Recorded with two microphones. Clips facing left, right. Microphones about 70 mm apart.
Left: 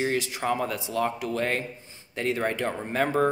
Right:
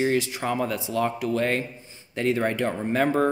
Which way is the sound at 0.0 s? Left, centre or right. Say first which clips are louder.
Right 3 dB; right.